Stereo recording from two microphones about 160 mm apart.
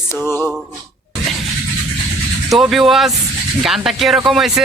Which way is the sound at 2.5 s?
Centre (ahead or behind).